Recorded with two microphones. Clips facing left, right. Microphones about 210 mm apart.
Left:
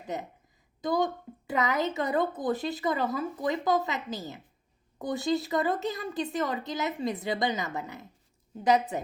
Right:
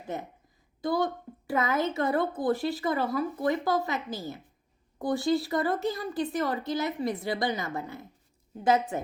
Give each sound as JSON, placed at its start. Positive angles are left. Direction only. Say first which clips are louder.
{"t": 0.8, "sound": "a woman's voice", "louder": "even", "side_deg": 20}